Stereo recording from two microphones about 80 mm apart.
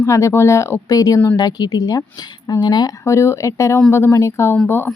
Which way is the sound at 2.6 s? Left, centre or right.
Left.